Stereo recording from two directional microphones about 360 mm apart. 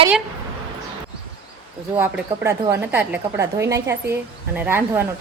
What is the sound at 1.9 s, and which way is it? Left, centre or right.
A woman's voice, centre.